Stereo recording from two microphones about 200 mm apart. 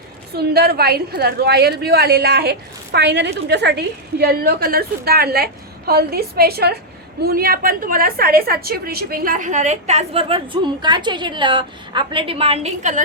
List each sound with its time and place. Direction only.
0.3 s a woman's voice: 50° right (ahead or behind); by 13.0 s 35° right (ahead or behind)